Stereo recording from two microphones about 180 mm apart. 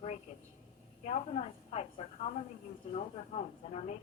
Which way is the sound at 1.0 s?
35° left (ahead or behind).